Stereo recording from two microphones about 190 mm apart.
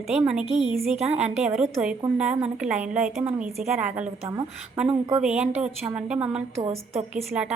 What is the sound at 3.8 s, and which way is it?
Speech, 40° right (ahead or behind).